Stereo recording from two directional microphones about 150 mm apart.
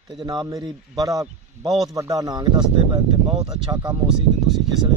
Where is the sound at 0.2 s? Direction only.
25° right (ahead or behind).